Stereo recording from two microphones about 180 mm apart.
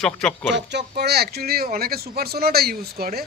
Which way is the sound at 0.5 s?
70° right (ahead or behind).